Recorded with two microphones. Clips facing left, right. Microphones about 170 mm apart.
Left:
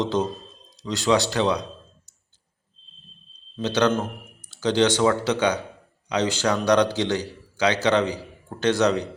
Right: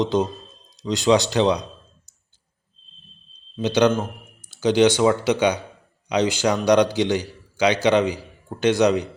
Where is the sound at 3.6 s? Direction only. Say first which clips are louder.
Right 3 dB; 10° right (ahead or behind).